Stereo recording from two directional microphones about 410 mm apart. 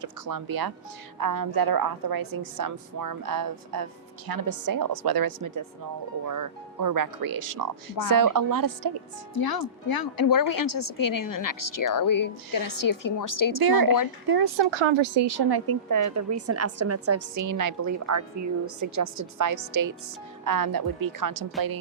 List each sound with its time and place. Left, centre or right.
0.0 s a woman's voice: right
9.3 s a woman's voice: left
14.3 s a woman's voice: right
19.0 s a woman's voice: right
19.4 s a woman's voice: right